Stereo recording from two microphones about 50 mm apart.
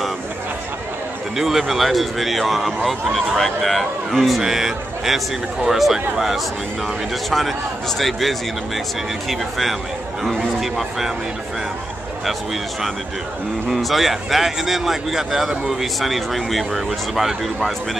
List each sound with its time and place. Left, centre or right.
1.3 s speech: centre
13.7 s speech: centre